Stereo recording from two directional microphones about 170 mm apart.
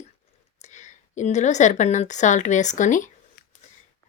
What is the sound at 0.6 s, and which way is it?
A woman's voice, 45° left (ahead or behind).